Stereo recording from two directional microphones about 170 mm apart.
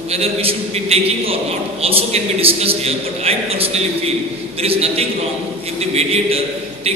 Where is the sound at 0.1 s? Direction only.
35° right (ahead or behind).